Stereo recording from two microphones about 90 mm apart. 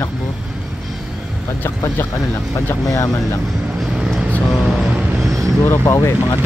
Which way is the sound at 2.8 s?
35° left (ahead or behind).